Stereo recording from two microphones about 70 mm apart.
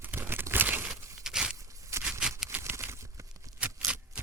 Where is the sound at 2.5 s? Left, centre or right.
Right.